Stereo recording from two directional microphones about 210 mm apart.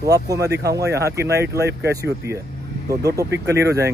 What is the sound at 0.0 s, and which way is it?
Speech, 15° right (ahead or behind).